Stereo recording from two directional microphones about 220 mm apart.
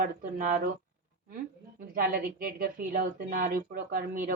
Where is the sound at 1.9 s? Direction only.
40° right (ahead or behind).